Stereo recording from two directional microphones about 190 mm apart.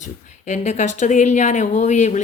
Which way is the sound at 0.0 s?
40° left (ahead or behind).